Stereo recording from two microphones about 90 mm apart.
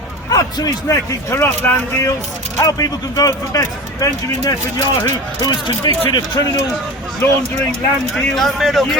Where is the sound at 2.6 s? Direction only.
40° left (ahead or behind).